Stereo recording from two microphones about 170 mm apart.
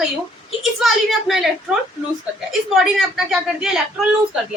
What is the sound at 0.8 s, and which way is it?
A woman's voice, centre (ahead or behind).